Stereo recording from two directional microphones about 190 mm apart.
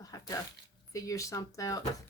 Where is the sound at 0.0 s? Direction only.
20° left (ahead or behind).